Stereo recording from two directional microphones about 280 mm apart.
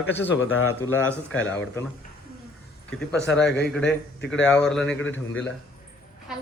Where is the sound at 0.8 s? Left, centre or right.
Centre.